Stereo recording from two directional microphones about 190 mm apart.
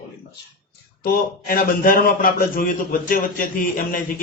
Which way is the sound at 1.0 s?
50° left (ahead or behind).